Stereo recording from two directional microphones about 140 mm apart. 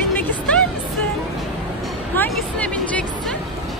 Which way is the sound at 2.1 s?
10° left (ahead or behind).